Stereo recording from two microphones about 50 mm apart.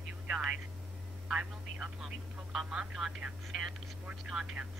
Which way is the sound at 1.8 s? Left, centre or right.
Centre.